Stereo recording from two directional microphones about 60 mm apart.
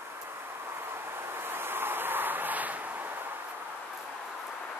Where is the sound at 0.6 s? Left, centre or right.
Right.